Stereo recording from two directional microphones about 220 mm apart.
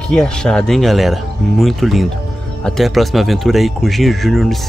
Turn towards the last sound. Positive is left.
turn(degrees=0)  # may be behind; listen again after turning